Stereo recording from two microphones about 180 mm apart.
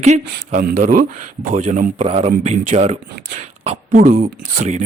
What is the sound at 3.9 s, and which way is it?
Speech, 50° right (ahead or behind).